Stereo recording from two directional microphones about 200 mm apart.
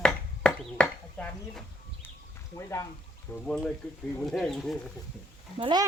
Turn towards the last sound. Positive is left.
turn(degrees=-20)  # may be behind; listen again after turning